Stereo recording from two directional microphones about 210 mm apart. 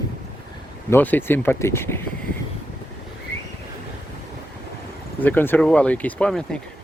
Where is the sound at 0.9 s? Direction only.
10° left (ahead or behind).